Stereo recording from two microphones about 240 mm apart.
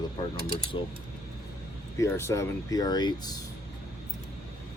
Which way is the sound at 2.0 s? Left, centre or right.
Centre.